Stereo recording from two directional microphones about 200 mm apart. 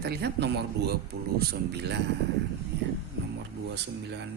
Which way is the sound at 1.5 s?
55° right (ahead or behind).